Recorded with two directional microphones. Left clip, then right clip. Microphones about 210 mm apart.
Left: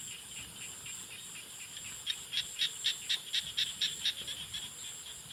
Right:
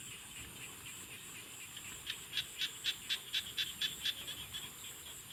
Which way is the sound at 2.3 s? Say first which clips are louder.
Left 4 dB; 30° right (ahead or behind).